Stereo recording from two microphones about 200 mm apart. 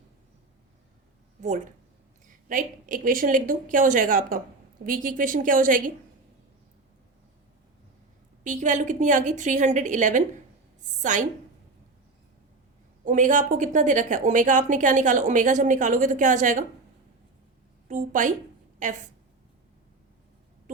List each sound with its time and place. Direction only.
2.2 s a woman's voice: 40° right (ahead or behind)
8.4 s a woman's voice: 40° right (ahead or behind)
13.1 s a woman's voice: 40° right (ahead or behind)
17.8 s a woman's voice: 40° right (ahead or behind)
20.7 s a sound: 40° right (ahead or behind)